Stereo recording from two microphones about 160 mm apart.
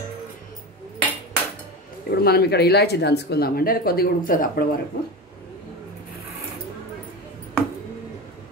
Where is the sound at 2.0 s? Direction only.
80° left; by 4.6 s 60° left (ahead or behind).